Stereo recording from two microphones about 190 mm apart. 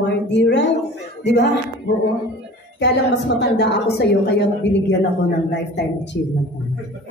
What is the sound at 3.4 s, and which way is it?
A woman's voice, 60° left (ahead or behind).